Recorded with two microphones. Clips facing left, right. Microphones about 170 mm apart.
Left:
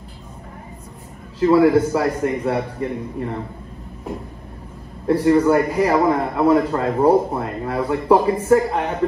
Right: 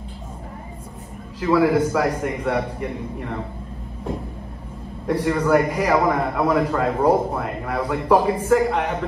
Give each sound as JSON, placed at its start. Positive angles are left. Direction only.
{"t": 1.4, "sound": "a man's voice", "side_deg": 30}
{"t": 5.0, "sound": "a man's voice", "side_deg": 30}